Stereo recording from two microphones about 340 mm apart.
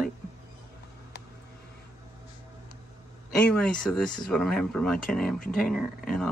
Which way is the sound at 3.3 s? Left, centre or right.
Centre.